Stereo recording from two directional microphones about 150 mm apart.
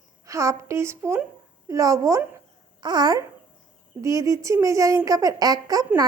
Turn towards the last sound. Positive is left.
turn(degrees=-25)  # may be behind; listen again after turning